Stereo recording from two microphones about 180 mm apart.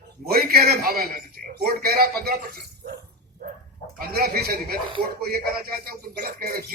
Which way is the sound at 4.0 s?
55° right (ahead or behind).